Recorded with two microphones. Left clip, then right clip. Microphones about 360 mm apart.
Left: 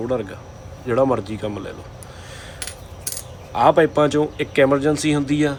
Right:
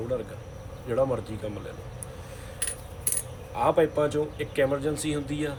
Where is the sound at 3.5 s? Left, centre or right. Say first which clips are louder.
Left 8 dB; left.